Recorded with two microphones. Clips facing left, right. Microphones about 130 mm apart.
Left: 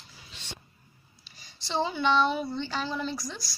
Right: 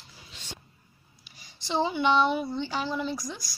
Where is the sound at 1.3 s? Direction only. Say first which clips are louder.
Right 2 dB; 15° right (ahead or behind).